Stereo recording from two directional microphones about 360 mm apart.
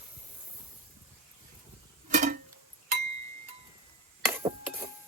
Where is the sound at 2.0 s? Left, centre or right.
Right.